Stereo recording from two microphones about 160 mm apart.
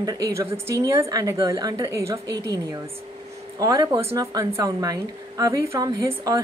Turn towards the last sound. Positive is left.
turn(degrees=-25)  # may be behind; listen again after turning